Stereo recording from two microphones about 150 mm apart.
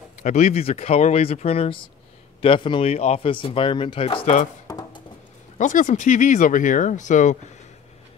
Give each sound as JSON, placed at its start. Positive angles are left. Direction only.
{"t": 0.2, "sound": "speech", "side_deg": 50}
{"t": 4.6, "sound": "a sound", "side_deg": 25}
{"t": 5.6, "sound": "speech", "side_deg": 55}